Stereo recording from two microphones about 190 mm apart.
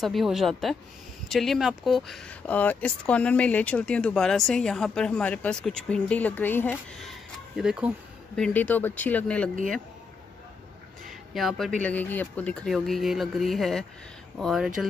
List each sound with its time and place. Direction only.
0.0 s speech: centre (ahead or behind)
8.4 s speech: 10° left (ahead or behind)
11.1 s a sound: centre (ahead or behind)
11.8 s speech: 10° left (ahead or behind)